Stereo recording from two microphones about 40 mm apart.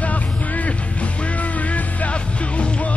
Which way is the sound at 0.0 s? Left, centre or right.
Left.